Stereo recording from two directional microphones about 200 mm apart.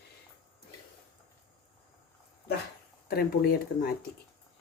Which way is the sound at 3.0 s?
50° left (ahead or behind).